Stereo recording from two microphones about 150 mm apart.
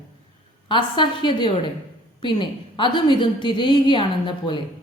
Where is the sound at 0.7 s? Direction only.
35° left (ahead or behind).